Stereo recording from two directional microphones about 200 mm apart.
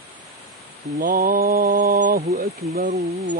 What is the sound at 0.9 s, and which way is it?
Mantra, 45° right (ahead or behind).